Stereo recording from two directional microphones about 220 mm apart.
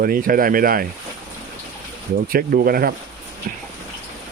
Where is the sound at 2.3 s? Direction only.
40° right (ahead or behind).